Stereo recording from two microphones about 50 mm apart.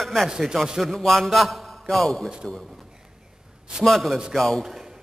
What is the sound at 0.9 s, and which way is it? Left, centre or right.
Speech, centre.